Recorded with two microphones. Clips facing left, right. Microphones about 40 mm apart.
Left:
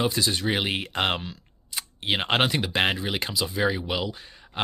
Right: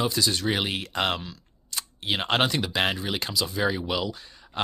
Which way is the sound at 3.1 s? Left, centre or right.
Left.